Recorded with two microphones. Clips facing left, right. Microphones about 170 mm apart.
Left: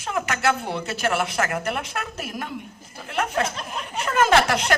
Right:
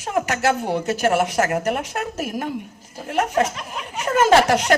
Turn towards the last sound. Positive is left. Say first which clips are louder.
# right 4 dB
turn(degrees=-40)  # may be behind; listen again after turning